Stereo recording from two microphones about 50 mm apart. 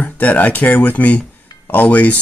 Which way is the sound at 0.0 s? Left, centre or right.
Left.